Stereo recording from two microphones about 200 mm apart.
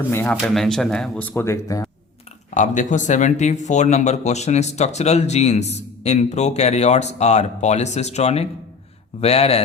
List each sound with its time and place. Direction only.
0.1 s speech: 10° left (ahead or behind)
2.6 s speech: 40° left (ahead or behind)